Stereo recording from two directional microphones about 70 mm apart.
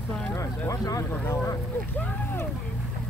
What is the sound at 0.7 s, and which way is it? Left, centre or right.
Speech, left.